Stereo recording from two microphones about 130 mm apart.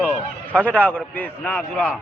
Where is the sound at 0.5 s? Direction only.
10° left (ahead or behind).